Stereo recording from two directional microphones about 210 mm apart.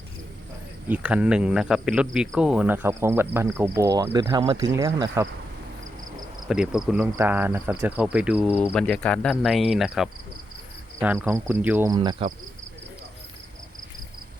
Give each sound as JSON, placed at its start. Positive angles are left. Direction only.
{"t": 0.9, "sound": "speech", "side_deg": -5}
{"t": 6.5, "sound": "speech", "side_deg": -5}
{"t": 8.7, "sound": "speech", "side_deg": 5}
{"t": 11.9, "sound": "speech", "side_deg": -20}